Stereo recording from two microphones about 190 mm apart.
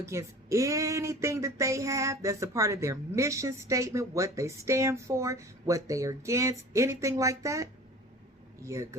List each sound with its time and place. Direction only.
0.0 s speech: 15° right (ahead or behind)